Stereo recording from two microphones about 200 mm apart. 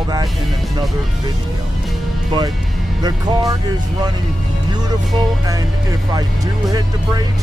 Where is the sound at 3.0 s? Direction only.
20° right (ahead or behind).